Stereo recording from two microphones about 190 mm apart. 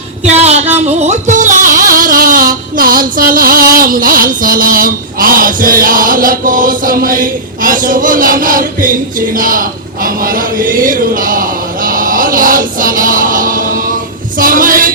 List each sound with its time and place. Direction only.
0.3 s speech: 35° right (ahead or behind)
0.9 s music: 40° right (ahead or behind)
3.8 s a sound: 50° right (ahead or behind)